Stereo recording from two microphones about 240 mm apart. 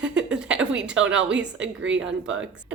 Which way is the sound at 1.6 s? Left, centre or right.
Right.